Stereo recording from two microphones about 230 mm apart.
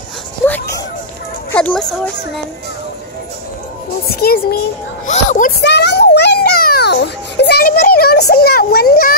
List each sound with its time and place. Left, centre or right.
0.5 s music: centre
1.5 s speech: centre
4.1 s a child's voice: left
5.6 s children playing: left